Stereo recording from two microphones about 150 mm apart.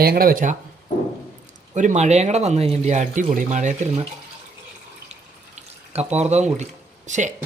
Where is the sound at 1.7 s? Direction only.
55° right (ahead or behind).